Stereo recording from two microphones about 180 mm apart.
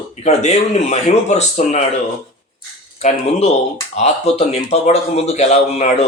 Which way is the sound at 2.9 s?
35° left (ahead or behind).